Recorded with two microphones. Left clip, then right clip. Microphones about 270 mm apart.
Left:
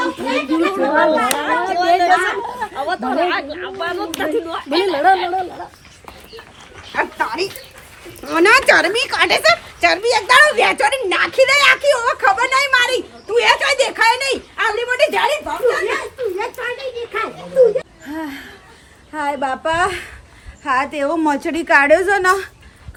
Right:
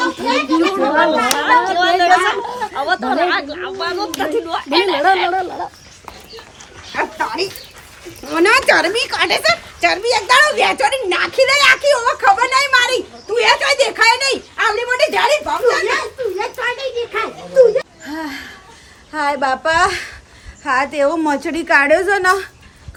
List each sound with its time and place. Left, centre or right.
0.0 s children playing: centre
1.9 s a woman's voice: centre
5.1 s speech: right
6.9 s a woman's voice: centre
18.0 s a sound: centre
19.1 s a woman's voice: centre